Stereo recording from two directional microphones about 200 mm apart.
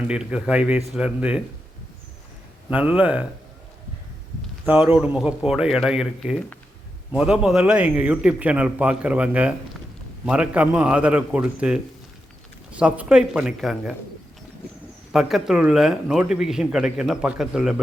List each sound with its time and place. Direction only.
0.1 s a man's voice: 5° right (ahead or behind)
2.6 s speech: 5° right (ahead or behind)
4.6 s a man's voice: 10° right (ahead or behind)
15.1 s a man's voice: centre (ahead or behind)